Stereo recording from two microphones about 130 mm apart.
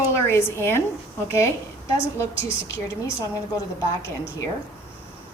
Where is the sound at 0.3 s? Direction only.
20° left (ahead or behind).